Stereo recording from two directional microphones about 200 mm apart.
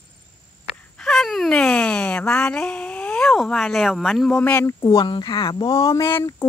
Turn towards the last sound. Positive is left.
turn(degrees=15)  # may be behind; listen again after turning